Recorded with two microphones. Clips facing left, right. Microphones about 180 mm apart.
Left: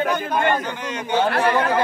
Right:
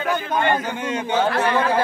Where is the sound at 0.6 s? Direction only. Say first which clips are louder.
Right 3 dB; 10° right (ahead or behind).